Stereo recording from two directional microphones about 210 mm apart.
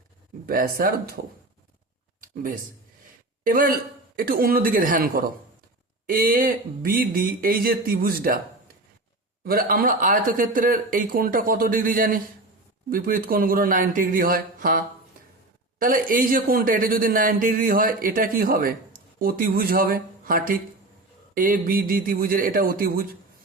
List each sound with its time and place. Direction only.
0.4 s speech: 45° right (ahead or behind)
2.2 s a sound: 40° right (ahead or behind)
3.4 s speech: 40° right (ahead or behind)
15.8 s speech: 40° right (ahead or behind)